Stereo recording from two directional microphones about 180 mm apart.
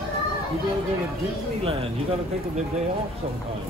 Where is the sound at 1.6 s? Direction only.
30° right (ahead or behind).